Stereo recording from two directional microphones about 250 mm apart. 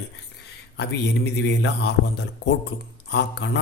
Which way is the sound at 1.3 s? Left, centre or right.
Left.